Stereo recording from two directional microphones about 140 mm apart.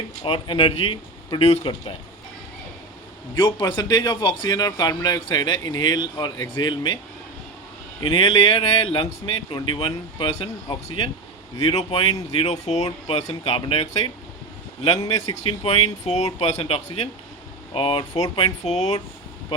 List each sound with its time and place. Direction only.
0.2 s a man's voice: 40° left (ahead or behind)
3.3 s a man's voice: 35° left (ahead or behind)
8.0 s a man's voice: 40° left (ahead or behind)
14.9 s speech: 25° left (ahead or behind)
15.6 s speech: 50° left (ahead or behind)